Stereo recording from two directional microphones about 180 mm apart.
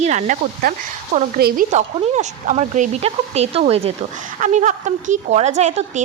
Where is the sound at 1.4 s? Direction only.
60° right (ahead or behind).